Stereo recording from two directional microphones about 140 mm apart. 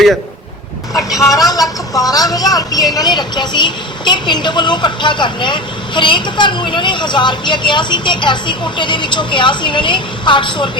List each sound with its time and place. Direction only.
0.9 s speech: 25° left (ahead or behind)